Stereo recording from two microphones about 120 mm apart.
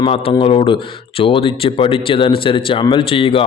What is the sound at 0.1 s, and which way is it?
Speech, 50° left (ahead or behind).